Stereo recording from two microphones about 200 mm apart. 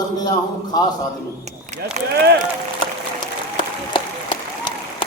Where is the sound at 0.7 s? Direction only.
20° left (ahead or behind).